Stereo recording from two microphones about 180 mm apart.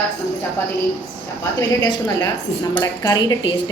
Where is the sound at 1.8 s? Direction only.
20° left (ahead or behind).